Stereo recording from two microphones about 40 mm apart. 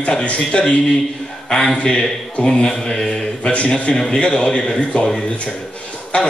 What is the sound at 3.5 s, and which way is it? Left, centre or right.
Speech, left.